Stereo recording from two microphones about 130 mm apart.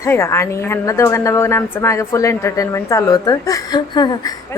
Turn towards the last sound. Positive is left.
turn(degrees=30)  # may be behind; listen again after turning